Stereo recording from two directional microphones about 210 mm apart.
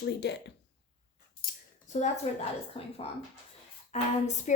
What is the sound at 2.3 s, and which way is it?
A woman's voice, 35° left (ahead or behind).